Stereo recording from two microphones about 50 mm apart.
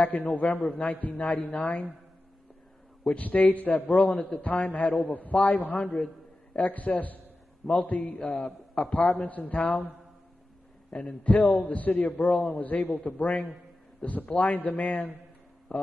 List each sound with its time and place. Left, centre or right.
0.0 s a man's voice: left
3.1 s a man's voice: left
8.2 s a man's voice: centre
9.2 s a man's voice: left
10.9 s a man's voice: left
13.0 s a man's voice: left
14.0 s a man's voice: left